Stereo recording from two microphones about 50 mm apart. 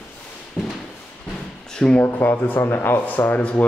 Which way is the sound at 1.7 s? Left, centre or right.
Centre.